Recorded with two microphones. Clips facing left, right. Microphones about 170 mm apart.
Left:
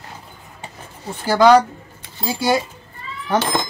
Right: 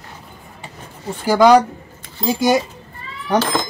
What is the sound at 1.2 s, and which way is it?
Speech, 15° right (ahead or behind).